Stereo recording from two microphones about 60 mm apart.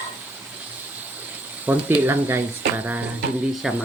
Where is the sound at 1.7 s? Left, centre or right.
Right.